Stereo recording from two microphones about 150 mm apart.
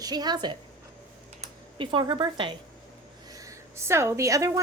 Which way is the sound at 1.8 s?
35° right (ahead or behind).